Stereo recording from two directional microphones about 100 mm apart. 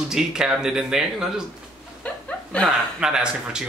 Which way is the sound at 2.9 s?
10° right (ahead or behind).